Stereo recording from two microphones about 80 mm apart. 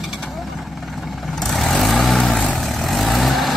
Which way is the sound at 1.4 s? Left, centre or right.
Centre.